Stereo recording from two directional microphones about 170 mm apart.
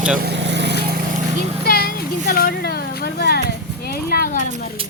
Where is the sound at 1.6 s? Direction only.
65° left (ahead or behind).